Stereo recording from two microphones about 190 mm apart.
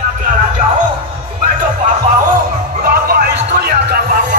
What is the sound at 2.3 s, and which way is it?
Music, 50° right (ahead or behind).